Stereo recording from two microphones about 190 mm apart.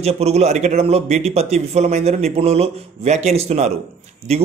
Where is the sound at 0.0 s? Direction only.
35° right (ahead or behind).